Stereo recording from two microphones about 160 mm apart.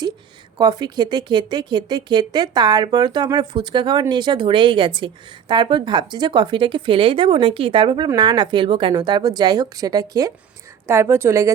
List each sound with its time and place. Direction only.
0.6 s a woman's voice: 25° right (ahead or behind)